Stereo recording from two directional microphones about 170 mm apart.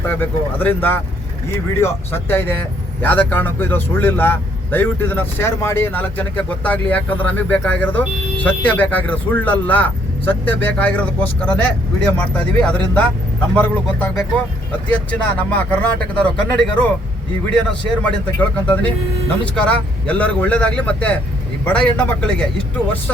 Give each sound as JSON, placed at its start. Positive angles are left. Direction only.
{"t": 0.0, "sound": "speech", "side_deg": 10}